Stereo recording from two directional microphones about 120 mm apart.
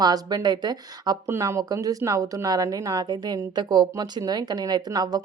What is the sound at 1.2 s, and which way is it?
A woman's voice, 20° right (ahead or behind).